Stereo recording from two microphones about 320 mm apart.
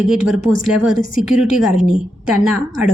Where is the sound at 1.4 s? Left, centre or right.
Centre.